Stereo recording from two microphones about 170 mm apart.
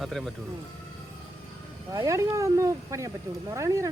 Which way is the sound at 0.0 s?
Centre (ahead or behind).